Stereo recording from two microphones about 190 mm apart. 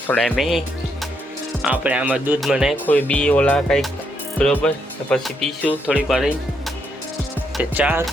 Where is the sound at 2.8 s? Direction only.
10° left (ahead or behind).